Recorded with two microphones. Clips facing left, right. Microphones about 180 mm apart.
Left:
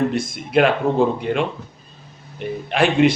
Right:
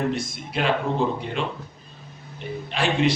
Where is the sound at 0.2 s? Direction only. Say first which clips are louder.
Left 10 dB; 60° left (ahead or behind).